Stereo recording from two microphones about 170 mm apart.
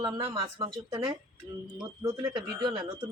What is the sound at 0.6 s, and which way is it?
Speech, 25° right (ahead or behind).